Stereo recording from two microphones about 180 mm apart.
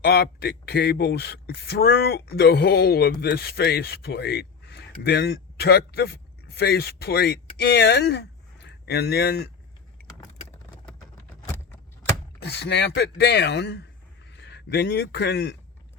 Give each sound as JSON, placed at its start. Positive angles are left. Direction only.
{"t": 0.0, "sound": "speech", "side_deg": 60}
{"t": 12.4, "sound": "speech", "side_deg": 65}